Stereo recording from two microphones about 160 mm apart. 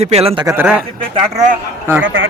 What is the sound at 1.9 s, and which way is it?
Speech, 15° right (ahead or behind).